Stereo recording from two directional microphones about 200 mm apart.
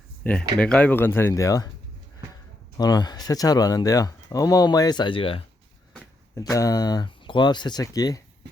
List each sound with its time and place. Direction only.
0.2 s speech: 10° left (ahead or behind)
2.7 s speech: 20° left (ahead or behind)
6.3 s speech: 15° left (ahead or behind)